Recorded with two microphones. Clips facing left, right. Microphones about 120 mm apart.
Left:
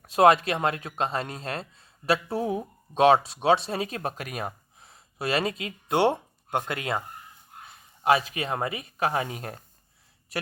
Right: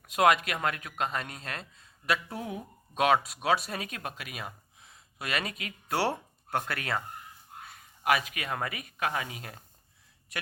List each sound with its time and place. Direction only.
0.1 s speech: 30° left (ahead or behind)
8.0 s speech: 30° left (ahead or behind)